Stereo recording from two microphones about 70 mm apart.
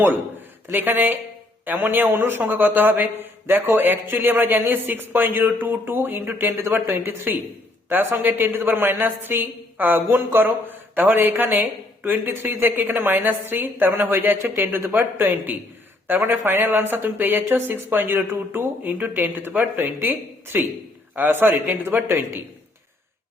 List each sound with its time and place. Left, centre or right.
0.0 s speech: right
8.4 s speech: right
8.7 s speech: right